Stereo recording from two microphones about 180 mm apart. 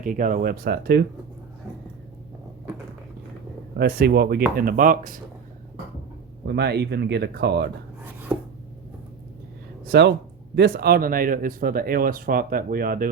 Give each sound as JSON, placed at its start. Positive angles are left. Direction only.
{"t": 0.0, "sound": "speech", "side_deg": -45}
{"t": 3.8, "sound": "speech", "side_deg": -60}
{"t": 6.4, "sound": "speech", "side_deg": -65}
{"t": 9.9, "sound": "speech", "side_deg": -70}